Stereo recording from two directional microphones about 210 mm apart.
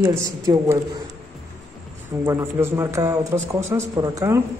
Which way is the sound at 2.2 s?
10° right (ahead or behind).